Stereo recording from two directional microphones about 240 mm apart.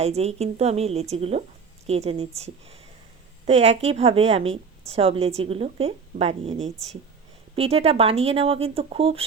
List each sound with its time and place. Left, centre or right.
0.0 s a woman's voice: right